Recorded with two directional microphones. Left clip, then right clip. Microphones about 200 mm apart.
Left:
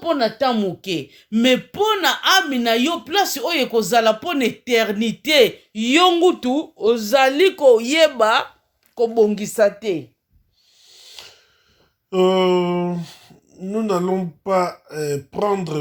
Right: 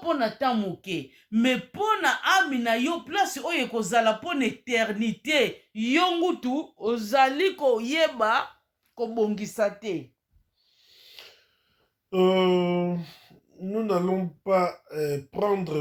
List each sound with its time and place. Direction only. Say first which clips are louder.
0.0 s a woman's voice: left 7 dB; 40° left (ahead or behind)
10.8 s a sound: left 7 dB; 25° left (ahead or behind)
12.1 s speech: left 6 dB; 25° left (ahead or behind)